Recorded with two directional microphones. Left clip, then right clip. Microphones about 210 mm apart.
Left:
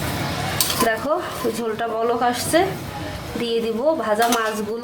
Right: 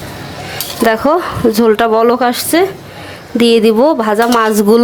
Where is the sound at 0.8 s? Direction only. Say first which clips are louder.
Right 13 dB; 45° right (ahead or behind).